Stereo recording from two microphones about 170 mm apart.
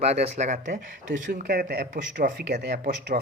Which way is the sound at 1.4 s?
70° right (ahead or behind).